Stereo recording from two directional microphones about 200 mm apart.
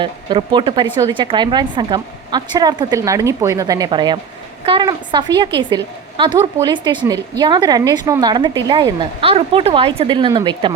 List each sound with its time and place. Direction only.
0.0 s speech: 25° right (ahead or behind)